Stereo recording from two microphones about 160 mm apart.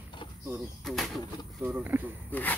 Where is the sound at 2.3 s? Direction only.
10° left (ahead or behind).